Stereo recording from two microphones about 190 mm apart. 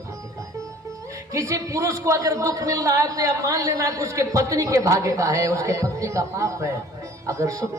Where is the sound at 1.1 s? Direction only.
15° right (ahead or behind).